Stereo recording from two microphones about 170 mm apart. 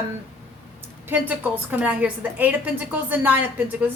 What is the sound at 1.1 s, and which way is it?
A woman's voice, 10° right (ahead or behind).